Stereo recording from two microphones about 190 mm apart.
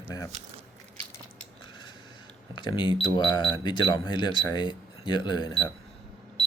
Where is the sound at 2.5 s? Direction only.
25° left (ahead or behind).